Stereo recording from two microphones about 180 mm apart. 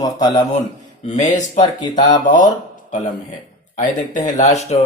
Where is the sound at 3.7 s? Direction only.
45° left (ahead or behind).